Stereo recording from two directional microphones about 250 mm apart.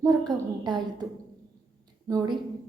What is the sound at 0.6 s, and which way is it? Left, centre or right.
Speech, centre.